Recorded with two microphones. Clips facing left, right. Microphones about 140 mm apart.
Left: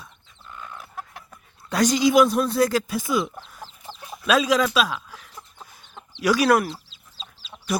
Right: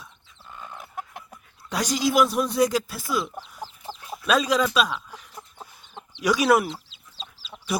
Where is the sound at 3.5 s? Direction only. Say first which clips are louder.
Right 3 dB; 10° right (ahead or behind).